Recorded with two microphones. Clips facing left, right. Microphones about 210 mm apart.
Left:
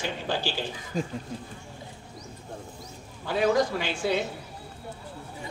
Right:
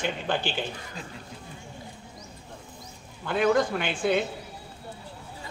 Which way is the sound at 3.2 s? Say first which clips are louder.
Right 1 dB; 55° right (ahead or behind).